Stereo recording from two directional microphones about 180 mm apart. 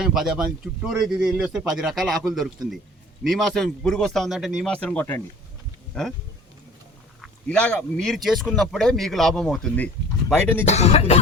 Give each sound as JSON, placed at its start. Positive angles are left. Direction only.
{"t": 0.0, "sound": "speech", "side_deg": -5}
{"t": 7.2, "sound": "speech", "side_deg": 5}
{"t": 10.7, "sound": "speech", "side_deg": 35}